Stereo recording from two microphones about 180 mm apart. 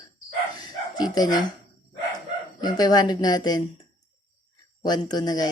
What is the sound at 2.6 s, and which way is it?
Speech, 20° left (ahead or behind).